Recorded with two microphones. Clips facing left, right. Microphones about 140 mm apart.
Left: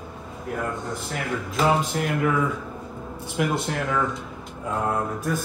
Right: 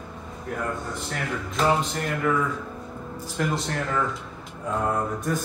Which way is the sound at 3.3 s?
5° left (ahead or behind).